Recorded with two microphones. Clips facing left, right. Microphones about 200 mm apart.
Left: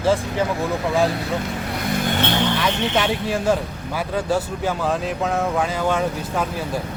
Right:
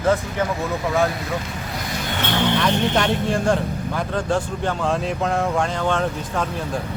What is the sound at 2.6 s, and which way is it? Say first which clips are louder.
Speech: right 1 dB; 5° left (ahead or behind).